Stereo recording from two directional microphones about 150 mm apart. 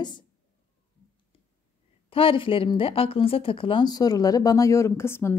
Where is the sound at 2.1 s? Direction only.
35° left (ahead or behind).